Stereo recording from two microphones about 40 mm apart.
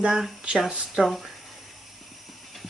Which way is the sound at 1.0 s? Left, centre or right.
Right.